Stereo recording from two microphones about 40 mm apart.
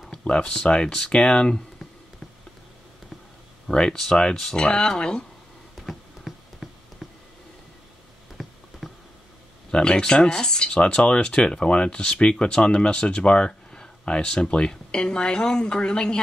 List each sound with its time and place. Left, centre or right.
0.2 s speech: left
0.5 s speech: left
3.6 s speech: centre
5.8 s a sound: centre
8.4 s a sound: centre
9.7 s speech: left